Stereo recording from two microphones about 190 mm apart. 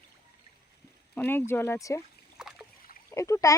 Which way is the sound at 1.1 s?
10° left (ahead or behind).